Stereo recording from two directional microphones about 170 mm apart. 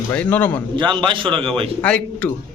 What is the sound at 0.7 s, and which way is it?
Speech, 30° right (ahead or behind).